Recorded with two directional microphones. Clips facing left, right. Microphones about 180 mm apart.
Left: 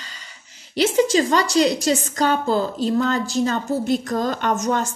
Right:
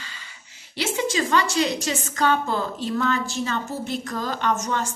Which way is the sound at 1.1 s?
35° left (ahead or behind).